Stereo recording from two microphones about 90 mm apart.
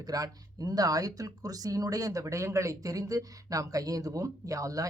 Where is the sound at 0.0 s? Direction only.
45° right (ahead or behind).